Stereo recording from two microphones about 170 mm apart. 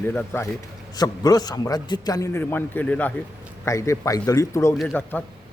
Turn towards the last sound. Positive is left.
turn(degrees=5)  # may be behind; listen again after turning